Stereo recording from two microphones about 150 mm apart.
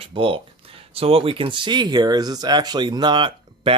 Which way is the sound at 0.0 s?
35° right (ahead or behind).